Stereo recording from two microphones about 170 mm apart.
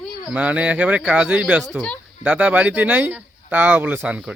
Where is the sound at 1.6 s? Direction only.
5° left (ahead or behind).